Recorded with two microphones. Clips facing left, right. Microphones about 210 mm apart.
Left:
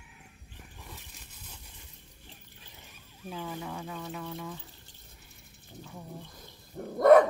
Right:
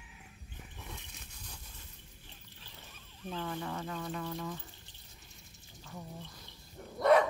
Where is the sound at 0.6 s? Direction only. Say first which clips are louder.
Right 1 dB; centre (ahead or behind).